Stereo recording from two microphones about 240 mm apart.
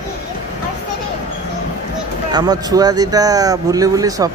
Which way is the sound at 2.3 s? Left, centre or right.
Centre.